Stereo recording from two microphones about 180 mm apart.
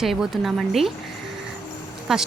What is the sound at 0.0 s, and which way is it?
Speech, centre (ahead or behind).